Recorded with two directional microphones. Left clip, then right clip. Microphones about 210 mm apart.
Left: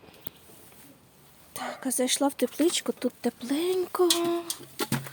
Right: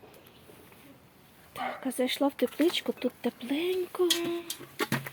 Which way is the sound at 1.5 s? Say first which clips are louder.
Left 1 dB; 10° left (ahead or behind).